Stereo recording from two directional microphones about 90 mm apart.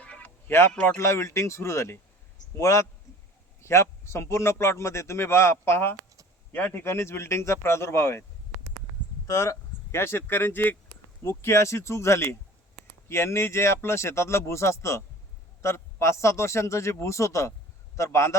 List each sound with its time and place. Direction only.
0.0 s music: 15° left (ahead or behind)
0.7 s speech: 15° left (ahead or behind)
0.9 s a man's voice: 30° left (ahead or behind)
9.2 s speech: 35° left (ahead or behind)